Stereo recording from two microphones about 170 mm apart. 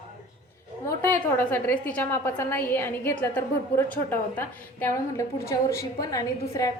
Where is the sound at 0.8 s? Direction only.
15° left (ahead or behind).